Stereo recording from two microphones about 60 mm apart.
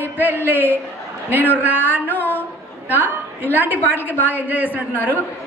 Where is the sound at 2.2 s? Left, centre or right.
Left.